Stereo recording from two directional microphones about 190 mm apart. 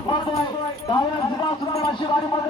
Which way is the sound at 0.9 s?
25° left (ahead or behind).